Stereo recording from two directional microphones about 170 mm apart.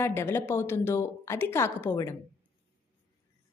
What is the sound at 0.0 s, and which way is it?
A woman's voice, 15° left (ahead or behind).